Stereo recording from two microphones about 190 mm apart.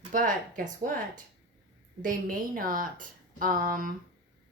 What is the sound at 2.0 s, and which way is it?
A woman's voice, 45° right (ahead or behind).